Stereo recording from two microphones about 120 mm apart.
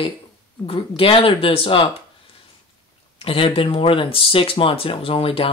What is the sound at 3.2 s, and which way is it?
Speech, 50° left (ahead or behind).